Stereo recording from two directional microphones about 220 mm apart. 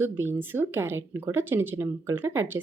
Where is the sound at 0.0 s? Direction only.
10° right (ahead or behind).